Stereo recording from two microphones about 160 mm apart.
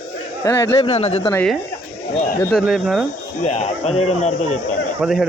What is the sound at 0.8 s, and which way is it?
Speech, 40° left (ahead or behind).